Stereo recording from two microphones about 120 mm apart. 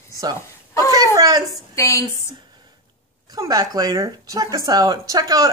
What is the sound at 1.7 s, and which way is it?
Speech, 25° left (ahead or behind).